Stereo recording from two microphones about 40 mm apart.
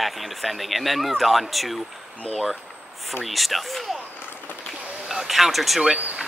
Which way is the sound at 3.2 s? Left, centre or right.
Centre.